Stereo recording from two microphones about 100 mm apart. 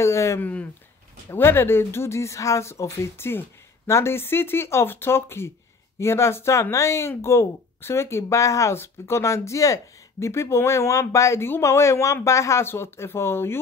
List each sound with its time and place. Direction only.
0.0 s speech: 30° left (ahead or behind)
0.4 s speech: 15° left (ahead or behind)